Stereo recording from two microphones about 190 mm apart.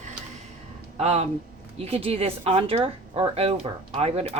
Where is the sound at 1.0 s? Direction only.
35° right (ahead or behind).